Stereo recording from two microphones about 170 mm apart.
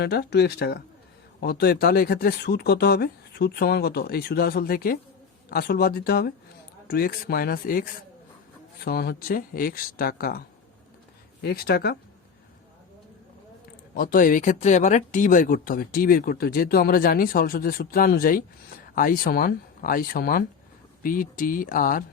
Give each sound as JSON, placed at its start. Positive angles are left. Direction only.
{"t": 0.0, "sound": "speech", "side_deg": 70}
{"t": 11.4, "sound": "speech", "side_deg": 65}
{"t": 13.9, "sound": "speech", "side_deg": 55}